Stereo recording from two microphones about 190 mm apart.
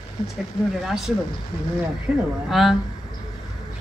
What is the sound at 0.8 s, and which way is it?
Speech, centre (ahead or behind).